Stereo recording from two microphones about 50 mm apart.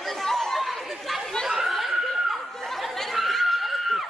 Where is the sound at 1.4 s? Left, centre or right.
Centre.